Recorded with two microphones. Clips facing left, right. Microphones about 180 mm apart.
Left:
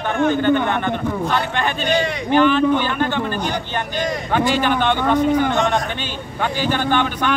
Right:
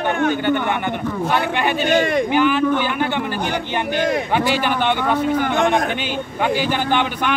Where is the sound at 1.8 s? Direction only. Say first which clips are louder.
Right 4 dB; 50° right (ahead or behind).